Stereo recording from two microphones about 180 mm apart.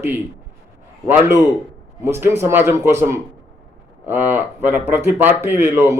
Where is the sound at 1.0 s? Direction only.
10° right (ahead or behind).